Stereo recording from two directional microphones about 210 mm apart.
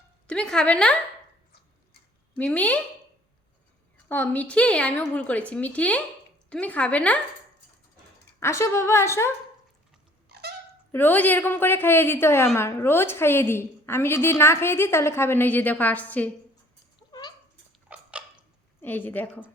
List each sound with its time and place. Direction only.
0.3 s a woman's voice: 5° left (ahead or behind)
2.3 s a woman's voice: 5° left (ahead or behind)
4.1 s a woman's voice: 10° left (ahead or behind)
8.4 s a woman's voice: 15° left (ahead or behind)
10.2 s a sound: 50° right (ahead or behind)
10.9 s a woman's voice: 10° left (ahead or behind)
17.0 s a sound: 20° left (ahead or behind)
17.8 s a sound: 5° right (ahead or behind)
18.8 s speech: 10° left (ahead or behind)